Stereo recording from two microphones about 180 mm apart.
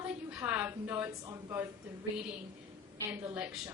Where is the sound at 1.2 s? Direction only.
20° right (ahead or behind).